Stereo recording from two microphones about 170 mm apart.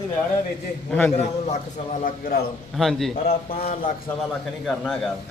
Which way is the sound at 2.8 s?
Centre (ahead or behind).